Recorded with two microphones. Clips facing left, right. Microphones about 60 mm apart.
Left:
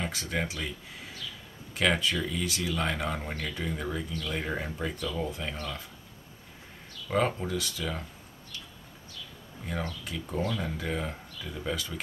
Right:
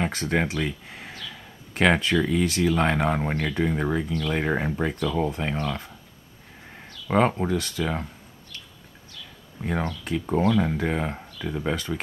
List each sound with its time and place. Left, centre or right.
0.0 s speech: right
7.1 s speech: right
9.7 s speech: right